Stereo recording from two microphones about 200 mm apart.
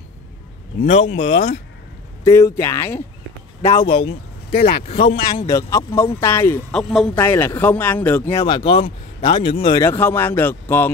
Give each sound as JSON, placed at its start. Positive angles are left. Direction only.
{"t": 0.8, "sound": "speech", "side_deg": 35}
{"t": 2.2, "sound": "speech", "side_deg": 15}
{"t": 3.6, "sound": "speech", "side_deg": 25}
{"t": 4.5, "sound": "speech", "side_deg": 55}
{"t": 4.8, "sound": "speech", "side_deg": 30}
{"t": 5.4, "sound": "speech", "side_deg": 15}
{"t": 8.5, "sound": "speech", "side_deg": 25}
{"t": 9.8, "sound": "speech", "side_deg": 10}